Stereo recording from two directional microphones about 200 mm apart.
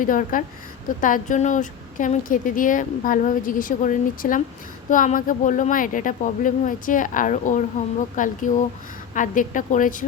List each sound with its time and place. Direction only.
0.0 s a woman's voice: 40° left (ahead or behind)